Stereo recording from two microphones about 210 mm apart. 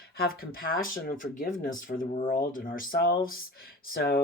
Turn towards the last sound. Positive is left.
turn(degrees=45)  # may be behind; listen again after turning